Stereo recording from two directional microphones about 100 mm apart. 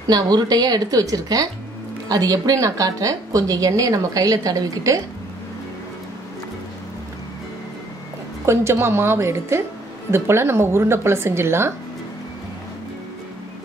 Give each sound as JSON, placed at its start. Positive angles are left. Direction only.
{"t": 0.0, "sound": "a woman's voice", "side_deg": -45}
{"t": 8.5, "sound": "a woman's voice", "side_deg": -25}